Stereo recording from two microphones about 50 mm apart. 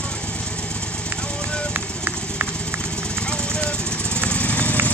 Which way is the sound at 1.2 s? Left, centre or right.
Centre.